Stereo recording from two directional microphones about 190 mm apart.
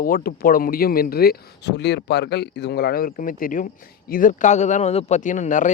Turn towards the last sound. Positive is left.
turn(degrees=40)  # may be behind; listen again after turning